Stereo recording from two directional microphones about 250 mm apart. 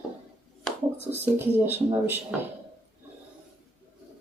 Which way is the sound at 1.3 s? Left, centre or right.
Centre.